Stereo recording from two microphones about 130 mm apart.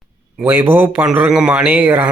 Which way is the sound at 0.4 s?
15° right (ahead or behind).